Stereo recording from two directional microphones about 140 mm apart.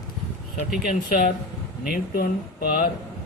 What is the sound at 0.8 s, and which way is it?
Speech, 90° left.